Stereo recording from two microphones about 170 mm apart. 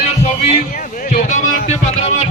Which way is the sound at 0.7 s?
55° left (ahead or behind).